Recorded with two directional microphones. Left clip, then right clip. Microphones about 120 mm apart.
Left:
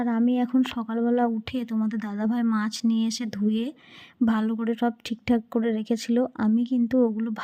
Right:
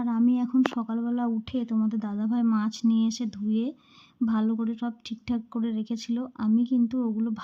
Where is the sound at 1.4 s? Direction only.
55° left (ahead or behind).